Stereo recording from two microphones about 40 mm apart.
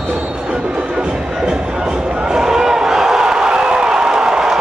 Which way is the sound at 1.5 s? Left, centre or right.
Centre.